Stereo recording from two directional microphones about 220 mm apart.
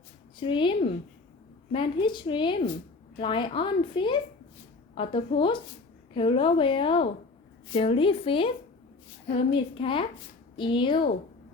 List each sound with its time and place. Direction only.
0.3 s speech: 20° left (ahead or behind)